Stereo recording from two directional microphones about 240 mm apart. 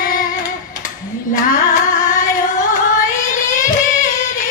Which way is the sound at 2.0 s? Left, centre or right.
Left.